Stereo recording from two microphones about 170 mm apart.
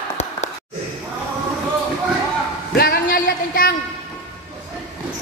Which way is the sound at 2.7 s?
60° left (ahead or behind).